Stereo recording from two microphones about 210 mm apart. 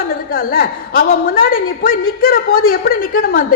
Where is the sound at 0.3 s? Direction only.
45° left (ahead or behind).